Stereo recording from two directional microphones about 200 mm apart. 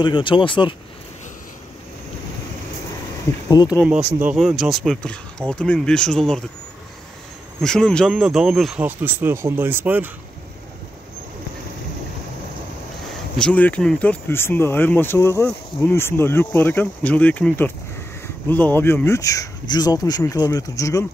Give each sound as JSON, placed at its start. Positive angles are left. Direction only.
{"t": 0.0, "sound": "speech", "side_deg": 25}
{"t": 3.4, "sound": "speech", "side_deg": 20}
{"t": 3.8, "sound": "speech", "side_deg": -5}
{"t": 7.6, "sound": "speech", "side_deg": 5}
{"t": 13.4, "sound": "speech", "side_deg": 5}